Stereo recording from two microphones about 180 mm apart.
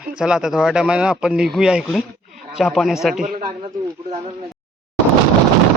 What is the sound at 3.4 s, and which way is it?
Speech, 20° right (ahead or behind).